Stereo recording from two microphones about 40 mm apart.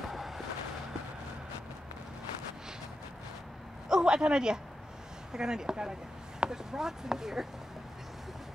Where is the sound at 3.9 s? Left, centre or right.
Right.